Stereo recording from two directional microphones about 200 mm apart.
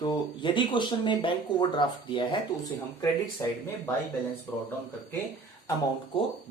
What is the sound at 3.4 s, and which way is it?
Speech, 15° left (ahead or behind).